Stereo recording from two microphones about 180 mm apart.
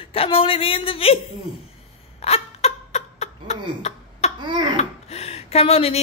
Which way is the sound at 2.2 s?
35° left (ahead or behind).